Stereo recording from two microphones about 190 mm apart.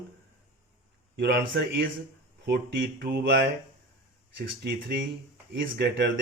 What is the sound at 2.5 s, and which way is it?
Speech, 55° right (ahead or behind).